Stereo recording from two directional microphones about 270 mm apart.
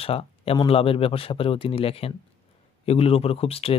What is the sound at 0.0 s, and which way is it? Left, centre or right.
Speech, left.